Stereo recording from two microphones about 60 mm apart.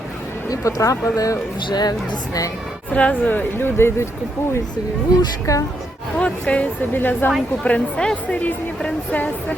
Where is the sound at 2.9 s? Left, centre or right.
Left.